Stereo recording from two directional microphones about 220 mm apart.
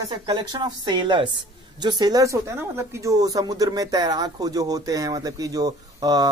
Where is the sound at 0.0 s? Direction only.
20° right (ahead or behind).